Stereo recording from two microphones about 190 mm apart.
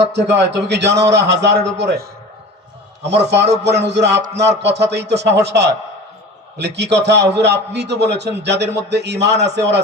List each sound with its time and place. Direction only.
0.0 s a man's voice: 65° right (ahead or behind)
3.0 s a man's voice: 35° right (ahead or behind)
3.2 s a man's voice: 65° right (ahead or behind)
3.6 s music: 65° right (ahead or behind)
4.4 s a man's voice: 65° right (ahead or behind)